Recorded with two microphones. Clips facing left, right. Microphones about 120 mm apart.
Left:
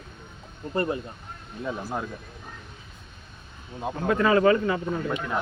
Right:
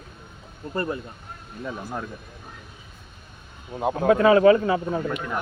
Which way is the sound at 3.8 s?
55° right (ahead or behind).